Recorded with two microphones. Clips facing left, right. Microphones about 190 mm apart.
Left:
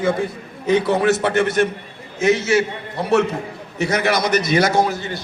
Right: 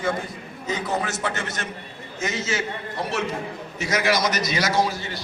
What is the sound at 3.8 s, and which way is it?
A man's voice, 60° left (ahead or behind).